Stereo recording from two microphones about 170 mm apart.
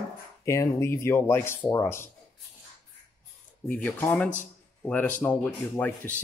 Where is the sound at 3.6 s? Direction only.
10° left (ahead or behind).